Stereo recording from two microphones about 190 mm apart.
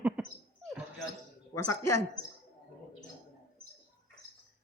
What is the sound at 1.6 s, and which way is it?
Speech, 15° left (ahead or behind).